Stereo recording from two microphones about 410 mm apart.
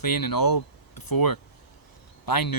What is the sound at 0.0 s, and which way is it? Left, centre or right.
Speech, left.